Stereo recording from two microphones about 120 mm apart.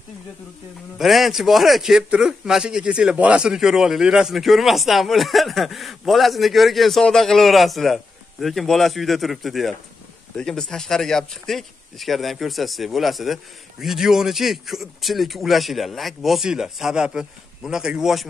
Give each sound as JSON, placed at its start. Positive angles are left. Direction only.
{"t": 0.9, "sound": "a man's voice", "side_deg": 0}